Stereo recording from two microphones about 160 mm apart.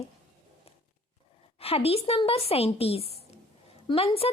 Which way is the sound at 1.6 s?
40° left (ahead or behind).